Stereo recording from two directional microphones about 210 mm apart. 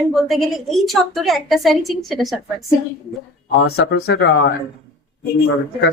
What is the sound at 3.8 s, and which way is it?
Speech, 50° left (ahead or behind).